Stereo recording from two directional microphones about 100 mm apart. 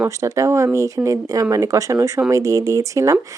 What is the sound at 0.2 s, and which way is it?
Speech, 30° right (ahead or behind).